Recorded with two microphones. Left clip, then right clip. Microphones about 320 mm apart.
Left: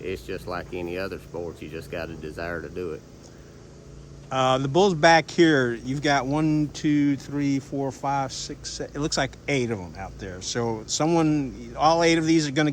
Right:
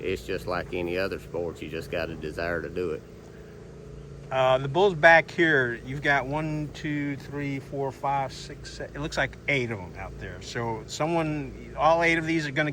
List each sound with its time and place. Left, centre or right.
0.0 s speech: centre
4.3 s speech: centre